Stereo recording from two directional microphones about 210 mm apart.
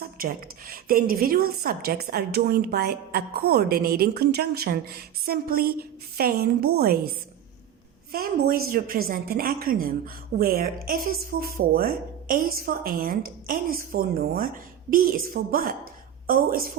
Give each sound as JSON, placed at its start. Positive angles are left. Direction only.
{"t": 0.0, "sound": "a woman's voice", "side_deg": -45}
{"t": 8.1, "sound": "a woman's voice", "side_deg": -45}